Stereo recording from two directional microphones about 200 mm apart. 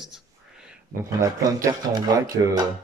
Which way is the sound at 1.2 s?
15° right (ahead or behind).